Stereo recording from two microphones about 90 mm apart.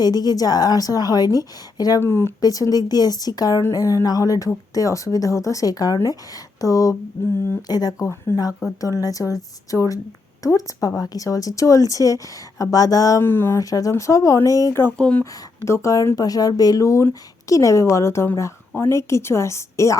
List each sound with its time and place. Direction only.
0.0 s a woman's voice: 45° left (ahead or behind)
2.0 s speech: 30° left (ahead or behind)
2.4 s a woman's voice: 40° left (ahead or behind)
13.2 s speech: 25° left (ahead or behind)
13.6 s speech: 40° left (ahead or behind)
14.9 s speech: 10° left (ahead or behind)
15.2 s speech: 35° left (ahead or behind)